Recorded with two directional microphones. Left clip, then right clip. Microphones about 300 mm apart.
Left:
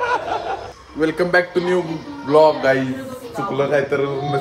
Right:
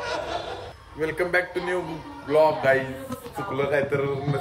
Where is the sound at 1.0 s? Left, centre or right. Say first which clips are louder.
Left 7 dB; centre.